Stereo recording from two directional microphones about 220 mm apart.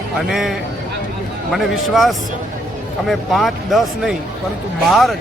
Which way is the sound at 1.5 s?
Centre (ahead or behind).